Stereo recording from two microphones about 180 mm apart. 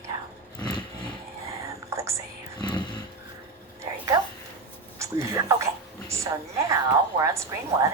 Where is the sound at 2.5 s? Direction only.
25° left (ahead or behind).